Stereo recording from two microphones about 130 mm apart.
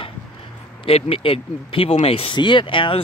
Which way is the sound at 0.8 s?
50° left (ahead or behind).